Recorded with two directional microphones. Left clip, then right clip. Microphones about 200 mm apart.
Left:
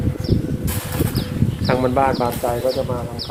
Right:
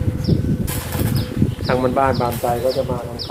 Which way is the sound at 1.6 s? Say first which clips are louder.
Even; 30° left (ahead or behind).